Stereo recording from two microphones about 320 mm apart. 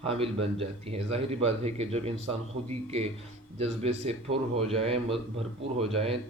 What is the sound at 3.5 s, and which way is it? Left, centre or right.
Speech, centre.